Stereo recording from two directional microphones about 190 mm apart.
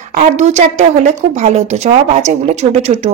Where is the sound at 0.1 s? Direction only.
40° right (ahead or behind).